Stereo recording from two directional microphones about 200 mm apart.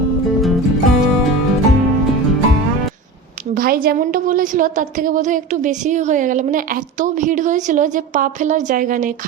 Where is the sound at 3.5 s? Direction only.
50° right (ahead or behind).